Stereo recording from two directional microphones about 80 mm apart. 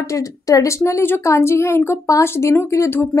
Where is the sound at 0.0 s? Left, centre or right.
Left.